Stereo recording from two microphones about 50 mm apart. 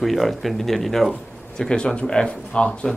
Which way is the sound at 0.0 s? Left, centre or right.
Centre.